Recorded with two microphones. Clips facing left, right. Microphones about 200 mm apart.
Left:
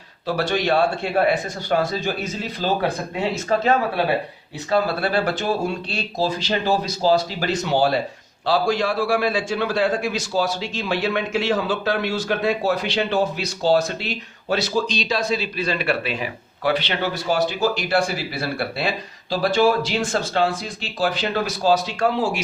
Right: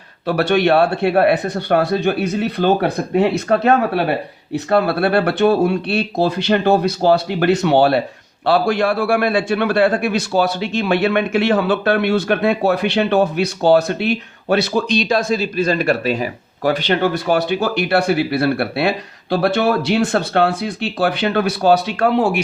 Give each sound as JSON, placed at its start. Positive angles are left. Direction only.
{"t": 0.3, "sound": "a man's voice", "side_deg": -65}